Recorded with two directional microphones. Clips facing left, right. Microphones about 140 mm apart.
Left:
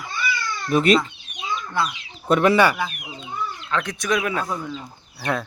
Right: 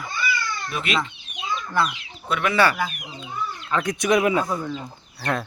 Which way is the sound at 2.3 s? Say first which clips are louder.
Left 7 dB; 35° left (ahead or behind).